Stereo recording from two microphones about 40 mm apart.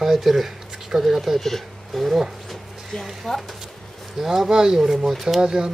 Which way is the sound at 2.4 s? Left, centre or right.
Centre.